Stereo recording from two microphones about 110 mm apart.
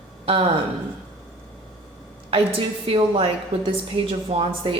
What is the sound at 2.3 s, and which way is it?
A woman's voice, 55° right (ahead or behind).